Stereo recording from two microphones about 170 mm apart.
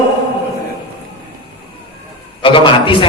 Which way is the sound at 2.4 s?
30° left (ahead or behind).